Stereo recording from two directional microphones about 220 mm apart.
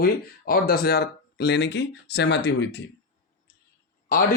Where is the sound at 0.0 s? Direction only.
40° left (ahead or behind).